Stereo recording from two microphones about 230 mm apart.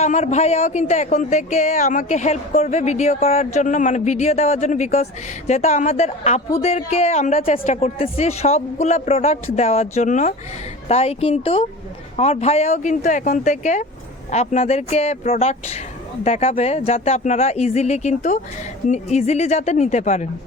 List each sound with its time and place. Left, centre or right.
0.0 s speech: left